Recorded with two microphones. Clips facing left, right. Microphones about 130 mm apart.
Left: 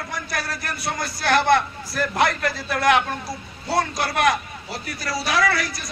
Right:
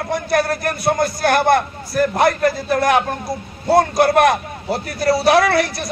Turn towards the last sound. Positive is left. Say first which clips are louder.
# right 7 dB
turn(degrees=-60)  # may be behind; listen again after turning